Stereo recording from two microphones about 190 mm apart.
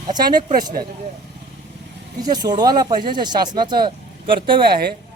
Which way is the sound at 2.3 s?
20° right (ahead or behind).